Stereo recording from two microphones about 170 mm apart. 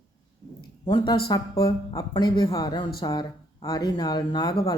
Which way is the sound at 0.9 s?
20° left (ahead or behind).